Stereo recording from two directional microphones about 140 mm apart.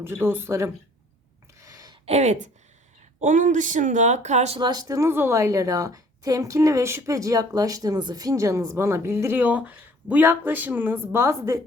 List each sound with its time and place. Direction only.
0.0 s speech: 15° right (ahead or behind)
1.6 s a sound: 25° right (ahead or behind)
2.0 s speech: 50° right (ahead or behind)
3.2 s speech: 65° right (ahead or behind)
4.6 s a woman's voice: 25° right (ahead or behind)